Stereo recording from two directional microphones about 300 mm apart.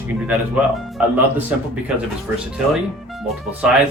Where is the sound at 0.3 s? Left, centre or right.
Centre.